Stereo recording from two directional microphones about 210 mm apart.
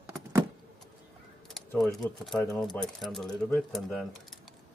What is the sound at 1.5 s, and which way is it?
Speech, centre (ahead or behind).